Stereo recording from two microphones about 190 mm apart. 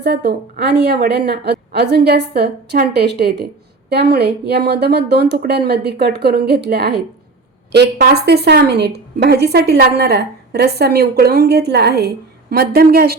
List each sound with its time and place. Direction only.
0.0 s a woman's voice: 60° right (ahead or behind)